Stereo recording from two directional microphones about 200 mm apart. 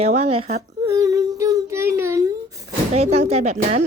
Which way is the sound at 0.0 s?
30° right (ahead or behind).